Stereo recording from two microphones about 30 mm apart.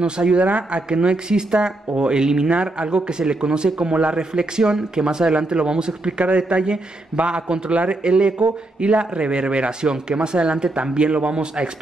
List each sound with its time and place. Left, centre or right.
0.0 s speech: right
0.4 s speech: right
2.5 s speech: right
4.2 s speech: right
6.1 s speech: right
7.7 s speech: right
8.0 s speech: right